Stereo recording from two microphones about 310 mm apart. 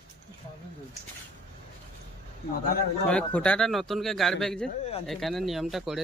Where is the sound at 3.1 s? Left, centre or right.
Centre.